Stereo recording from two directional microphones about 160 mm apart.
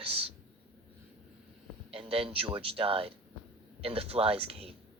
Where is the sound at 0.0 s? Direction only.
35° right (ahead or behind).